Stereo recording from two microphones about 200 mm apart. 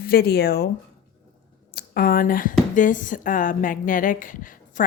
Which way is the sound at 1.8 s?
50° left (ahead or behind).